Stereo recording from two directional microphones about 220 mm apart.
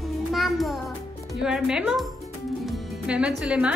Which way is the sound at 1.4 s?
5° right (ahead or behind).